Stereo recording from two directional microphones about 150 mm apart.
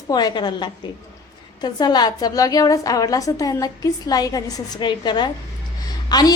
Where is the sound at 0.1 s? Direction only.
25° left (ahead or behind).